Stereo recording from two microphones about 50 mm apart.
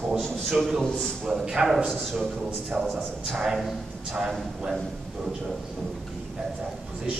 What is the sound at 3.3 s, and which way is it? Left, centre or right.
Speech, centre.